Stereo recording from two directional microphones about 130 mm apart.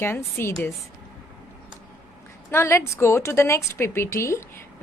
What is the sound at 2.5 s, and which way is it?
A woman's voice, 20° left (ahead or behind).